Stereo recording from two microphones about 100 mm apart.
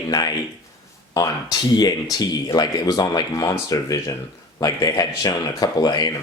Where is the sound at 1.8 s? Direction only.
40° left (ahead or behind).